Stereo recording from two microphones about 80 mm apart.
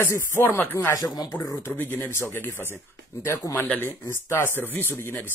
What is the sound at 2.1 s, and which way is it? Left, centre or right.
Speech, left.